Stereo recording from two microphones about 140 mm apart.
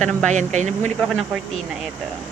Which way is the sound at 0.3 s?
60° right (ahead or behind).